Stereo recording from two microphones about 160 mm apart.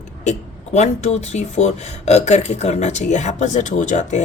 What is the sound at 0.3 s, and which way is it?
Speech, 45° left (ahead or behind).